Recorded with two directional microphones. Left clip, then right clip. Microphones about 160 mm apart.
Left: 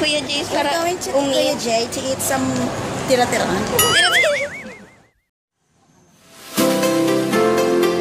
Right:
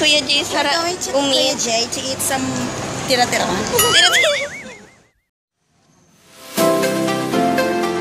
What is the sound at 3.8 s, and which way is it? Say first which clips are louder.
Speech: right 2 dB; 5° right (ahead or behind).